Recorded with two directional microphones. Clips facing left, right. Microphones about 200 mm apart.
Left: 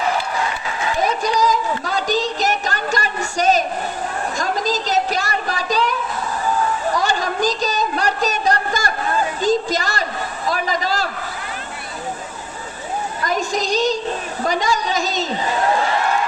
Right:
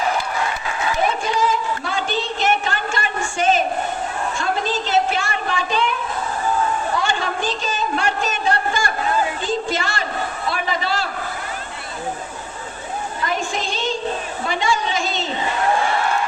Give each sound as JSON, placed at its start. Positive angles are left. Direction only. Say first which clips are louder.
{"t": 1.0, "sound": "a sound", "louder": "left 3 dB", "side_deg": 40}
{"t": 13.2, "sound": "child singing", "louder": "left 3 dB", "side_deg": 40}
{"t": 14.4, "sound": "a woman's voice", "louder": "left 2 dB", "side_deg": 40}